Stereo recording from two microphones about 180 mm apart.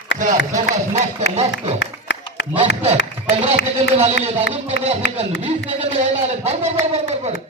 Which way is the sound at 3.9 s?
35° right (ahead or behind).